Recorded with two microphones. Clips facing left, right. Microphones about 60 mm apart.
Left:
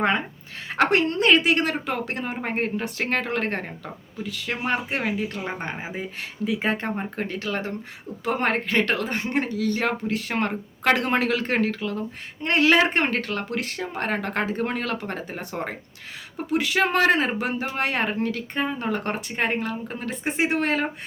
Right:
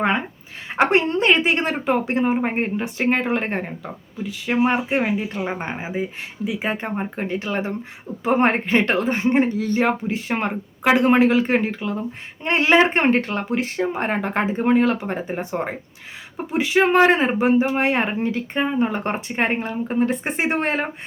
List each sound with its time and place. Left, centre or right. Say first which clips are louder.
0.7 s speech: right 3 dB; centre